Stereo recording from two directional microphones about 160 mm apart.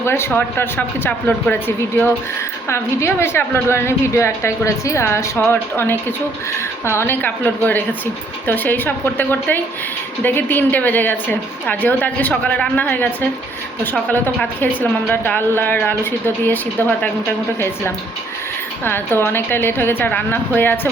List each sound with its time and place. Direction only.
0.0 s a woman's voice: 15° left (ahead or behind)
18.9 s a woman's voice: 15° left (ahead or behind)